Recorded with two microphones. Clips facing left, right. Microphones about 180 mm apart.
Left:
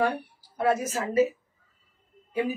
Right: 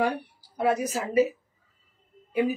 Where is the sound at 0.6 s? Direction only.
15° right (ahead or behind).